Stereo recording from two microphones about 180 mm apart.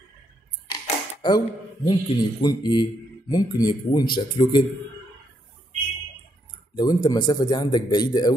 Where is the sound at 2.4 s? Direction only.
25° left (ahead or behind).